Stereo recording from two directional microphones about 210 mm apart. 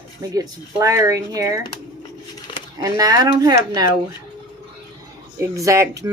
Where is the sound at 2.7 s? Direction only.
15° right (ahead or behind).